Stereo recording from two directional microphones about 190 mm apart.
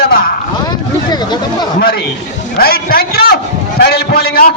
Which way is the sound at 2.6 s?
55° left (ahead or behind).